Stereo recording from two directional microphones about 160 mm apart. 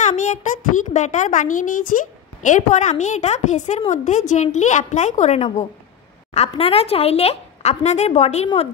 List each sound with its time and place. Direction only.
0.0 s a child's voice: 50° left (ahead or behind)